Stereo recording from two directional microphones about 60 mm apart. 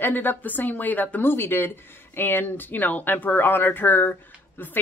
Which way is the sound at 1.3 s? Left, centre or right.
Left.